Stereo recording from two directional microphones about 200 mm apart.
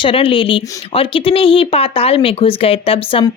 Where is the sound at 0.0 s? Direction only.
25° left (ahead or behind).